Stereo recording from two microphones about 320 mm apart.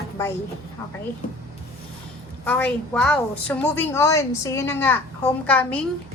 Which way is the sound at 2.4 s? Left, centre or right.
Centre.